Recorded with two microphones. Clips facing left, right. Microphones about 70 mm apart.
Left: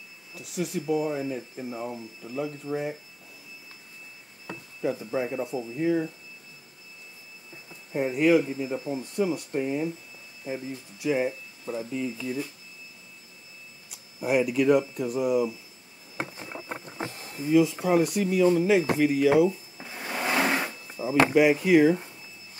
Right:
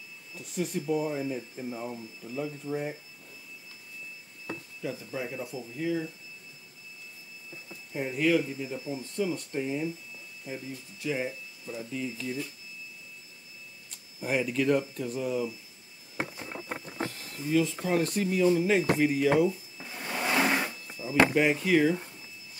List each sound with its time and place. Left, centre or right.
0.3 s speech: centre
4.8 s speech: left
7.9 s speech: centre
13.8 s speech: centre
16.9 s speech: centre
19.5 s drawer open or close: centre
20.9 s a sound: left
21.4 s speech: centre